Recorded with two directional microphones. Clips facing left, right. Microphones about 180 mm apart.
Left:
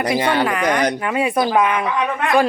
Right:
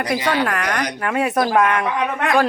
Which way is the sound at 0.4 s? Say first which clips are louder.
Left 4 dB; 5° left (ahead or behind).